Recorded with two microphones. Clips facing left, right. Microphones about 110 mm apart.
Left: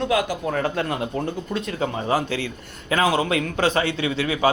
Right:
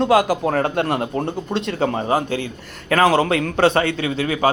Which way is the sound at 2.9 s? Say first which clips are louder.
Right 5 dB; 70° right (ahead or behind).